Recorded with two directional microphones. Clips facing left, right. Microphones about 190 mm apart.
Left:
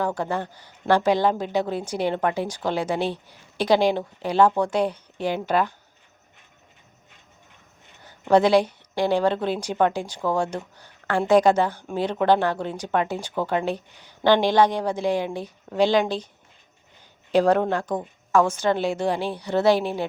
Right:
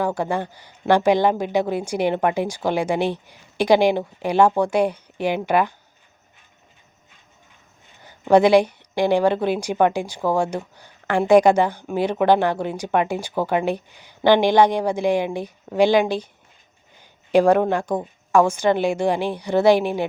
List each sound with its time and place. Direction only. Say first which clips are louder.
0.0 s a woman's voice: right 3 dB; 10° right (ahead or behind)
8.0 s a woman's voice: right 3 dB; 15° right (ahead or behind)
17.3 s a woman's voice: right 3 dB; 10° right (ahead or behind)